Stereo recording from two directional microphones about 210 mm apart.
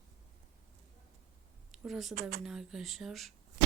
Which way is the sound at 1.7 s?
Centre (ahead or behind).